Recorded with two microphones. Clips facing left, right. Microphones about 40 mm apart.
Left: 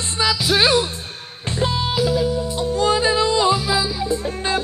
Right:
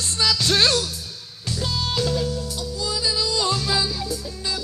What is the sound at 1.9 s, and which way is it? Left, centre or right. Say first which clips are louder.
Music: left 3 dB; centre.